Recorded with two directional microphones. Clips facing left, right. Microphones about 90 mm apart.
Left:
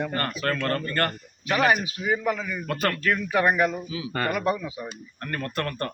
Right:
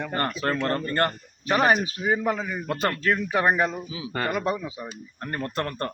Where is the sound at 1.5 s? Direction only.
35° right (ahead or behind).